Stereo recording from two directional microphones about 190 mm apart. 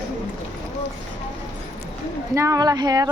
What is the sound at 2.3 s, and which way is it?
Speech, 15° right (ahead or behind).